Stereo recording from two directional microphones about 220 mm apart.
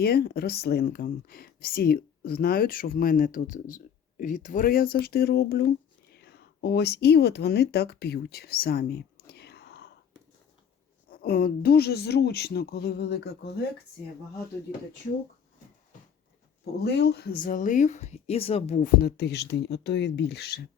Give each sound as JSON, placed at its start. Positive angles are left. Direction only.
{"t": 0.0, "sound": "speech", "side_deg": 45}
{"t": 11.1, "sound": "speech", "side_deg": 40}
{"t": 16.8, "sound": "speech", "side_deg": 50}